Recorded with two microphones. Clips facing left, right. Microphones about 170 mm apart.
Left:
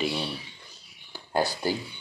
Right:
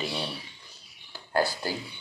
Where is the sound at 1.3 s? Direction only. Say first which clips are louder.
Even; 20° left (ahead or behind).